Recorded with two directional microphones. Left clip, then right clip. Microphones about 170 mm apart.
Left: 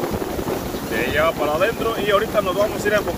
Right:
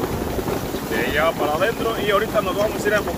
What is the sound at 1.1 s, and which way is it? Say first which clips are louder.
Speech: left 1 dB; 40° left (ahead or behind).